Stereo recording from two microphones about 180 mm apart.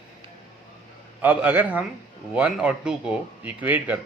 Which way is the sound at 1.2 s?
10° right (ahead or behind).